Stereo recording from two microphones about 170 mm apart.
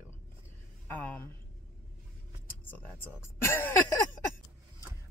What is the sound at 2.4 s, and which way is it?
Speech, 10° left (ahead or behind).